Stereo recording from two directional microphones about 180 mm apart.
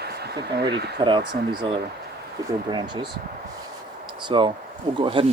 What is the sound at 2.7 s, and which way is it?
Speech, 25° right (ahead or behind).